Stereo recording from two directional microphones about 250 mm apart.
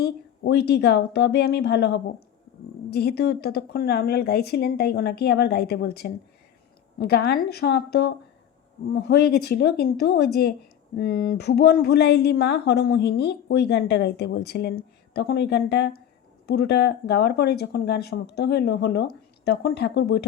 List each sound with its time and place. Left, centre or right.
0.0 s speech: left